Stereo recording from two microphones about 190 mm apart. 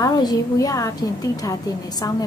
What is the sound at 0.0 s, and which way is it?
A woman's voice, 20° left (ahead or behind).